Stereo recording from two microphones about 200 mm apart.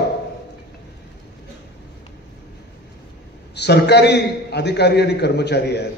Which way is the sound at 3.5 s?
55° left (ahead or behind).